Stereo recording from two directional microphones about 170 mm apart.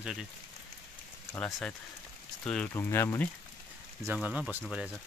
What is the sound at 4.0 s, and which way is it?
Speech, 10° right (ahead or behind).